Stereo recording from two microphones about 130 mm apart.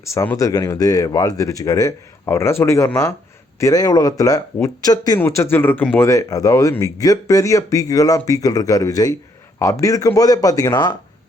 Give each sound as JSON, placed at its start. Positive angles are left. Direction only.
{"t": 0.3, "sound": "speech", "side_deg": 25}
{"t": 6.1, "sound": "speech", "side_deg": 25}